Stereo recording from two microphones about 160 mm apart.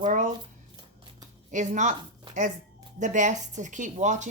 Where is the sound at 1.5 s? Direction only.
50° right (ahead or behind).